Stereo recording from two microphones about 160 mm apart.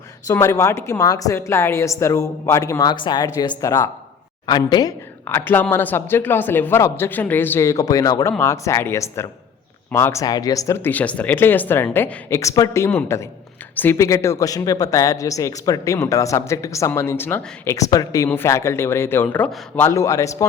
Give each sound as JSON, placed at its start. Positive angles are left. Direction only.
{"t": 0.3, "sound": "speech", "side_deg": 20}